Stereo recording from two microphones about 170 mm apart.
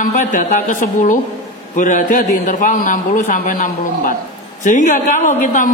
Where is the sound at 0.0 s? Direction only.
50° left (ahead or behind).